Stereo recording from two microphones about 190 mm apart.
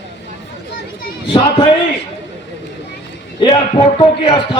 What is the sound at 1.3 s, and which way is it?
Speech, 25° left (ahead or behind).